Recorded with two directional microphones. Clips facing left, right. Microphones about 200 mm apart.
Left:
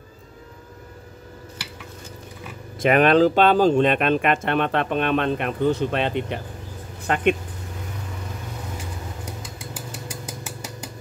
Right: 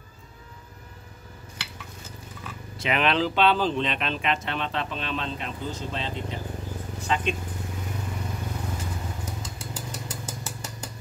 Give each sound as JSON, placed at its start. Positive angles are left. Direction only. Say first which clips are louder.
{"t": 2.8, "sound": "speech", "louder": "left 9 dB", "side_deg": 50}
{"t": 9.8, "sound": "vehicle", "louder": "left 2 dB", "side_deg": 10}